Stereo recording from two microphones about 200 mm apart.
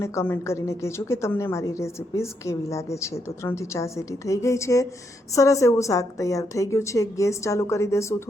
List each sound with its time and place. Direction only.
0.0 s a woman's voice: 15° left (ahead or behind)